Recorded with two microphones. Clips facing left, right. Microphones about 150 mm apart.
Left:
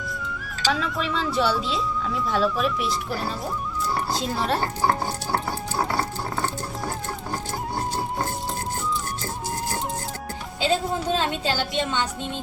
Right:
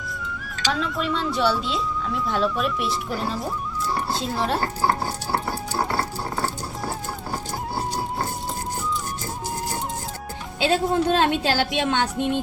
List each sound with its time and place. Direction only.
0.7 s speech: centre (ahead or behind)
6.4 s music: 5° right (ahead or behind)
10.7 s a woman's voice: 70° right (ahead or behind)